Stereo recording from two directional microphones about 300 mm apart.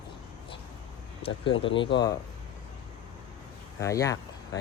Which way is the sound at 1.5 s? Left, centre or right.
Left.